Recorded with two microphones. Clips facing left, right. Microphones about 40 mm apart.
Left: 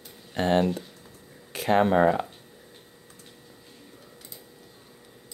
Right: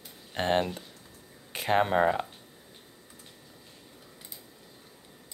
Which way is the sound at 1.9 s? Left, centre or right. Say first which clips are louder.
Left 4 dB; centre.